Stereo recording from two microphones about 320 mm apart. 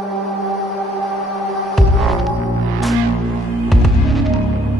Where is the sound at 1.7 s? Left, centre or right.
Centre.